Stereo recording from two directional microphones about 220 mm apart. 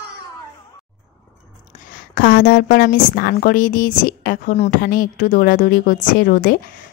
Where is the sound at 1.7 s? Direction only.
30° left (ahead or behind).